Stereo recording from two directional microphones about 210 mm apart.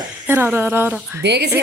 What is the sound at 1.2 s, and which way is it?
Speech, 55° right (ahead or behind).